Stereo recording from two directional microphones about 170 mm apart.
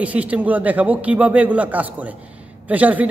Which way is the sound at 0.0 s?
10° right (ahead or behind).